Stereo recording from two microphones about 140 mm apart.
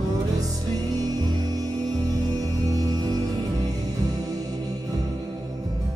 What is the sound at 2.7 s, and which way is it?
Music, 25° right (ahead or behind).